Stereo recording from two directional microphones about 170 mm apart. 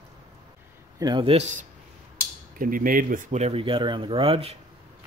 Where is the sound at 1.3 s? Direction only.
40° right (ahead or behind).